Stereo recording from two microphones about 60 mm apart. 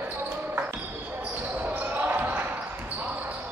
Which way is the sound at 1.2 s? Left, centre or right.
Right.